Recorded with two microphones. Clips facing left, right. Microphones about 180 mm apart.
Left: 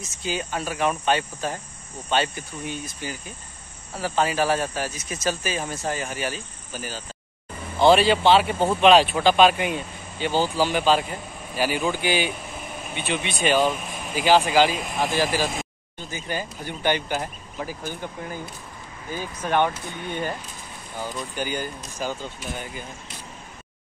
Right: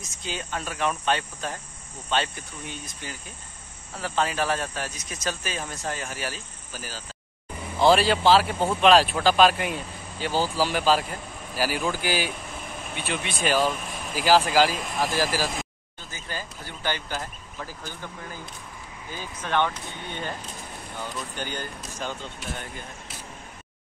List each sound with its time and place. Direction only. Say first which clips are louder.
0.2 s speech: left 5 dB; 5° left (ahead or behind)
16.1 s speech: left 6 dB; 15° left (ahead or behind)
19.1 s speech: left 3 dB; 10° left (ahead or behind)
21.4 s speech: left 8 dB; 10° left (ahead or behind)